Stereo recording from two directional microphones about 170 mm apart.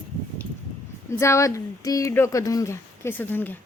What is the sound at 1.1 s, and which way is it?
Speech, 15° left (ahead or behind).